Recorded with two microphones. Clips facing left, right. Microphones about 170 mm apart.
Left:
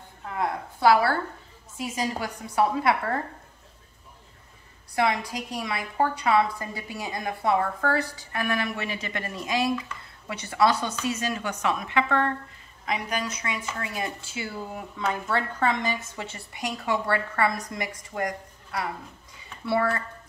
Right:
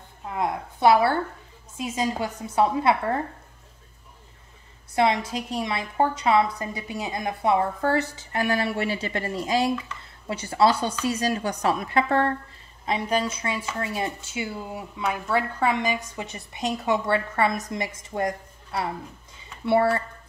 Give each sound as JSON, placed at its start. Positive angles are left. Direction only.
{"t": 0.2, "sound": "a sound", "side_deg": -20}
{"t": 1.8, "sound": "speech", "side_deg": -20}
{"t": 4.9, "sound": "a woman's voice", "side_deg": -20}